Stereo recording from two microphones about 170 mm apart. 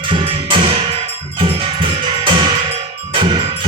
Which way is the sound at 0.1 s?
30° right (ahead or behind).